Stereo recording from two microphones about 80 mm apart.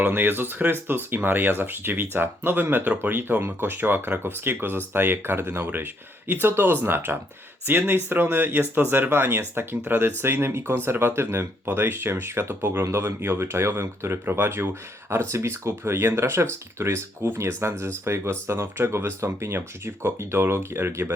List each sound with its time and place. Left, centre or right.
0.0 s speech: right